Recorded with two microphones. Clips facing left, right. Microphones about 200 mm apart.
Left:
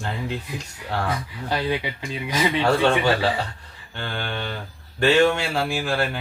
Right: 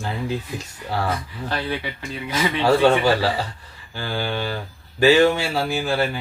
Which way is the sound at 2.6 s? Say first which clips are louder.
Right 5 dB; 5° right (ahead or behind).